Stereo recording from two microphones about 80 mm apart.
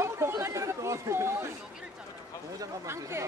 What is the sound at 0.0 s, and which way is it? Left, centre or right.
Chatter, right.